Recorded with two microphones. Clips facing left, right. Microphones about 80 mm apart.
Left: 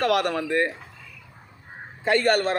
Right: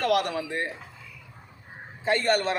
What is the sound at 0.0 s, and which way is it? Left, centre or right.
Speech, left.